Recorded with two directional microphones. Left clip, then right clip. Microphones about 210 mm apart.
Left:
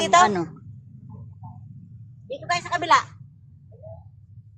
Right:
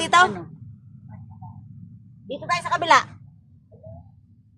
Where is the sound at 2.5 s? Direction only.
40° right (ahead or behind).